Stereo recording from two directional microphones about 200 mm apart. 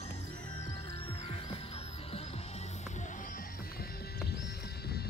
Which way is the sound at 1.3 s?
30° left (ahead or behind).